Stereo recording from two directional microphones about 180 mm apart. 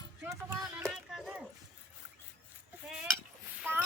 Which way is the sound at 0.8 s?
5° right (ahead or behind).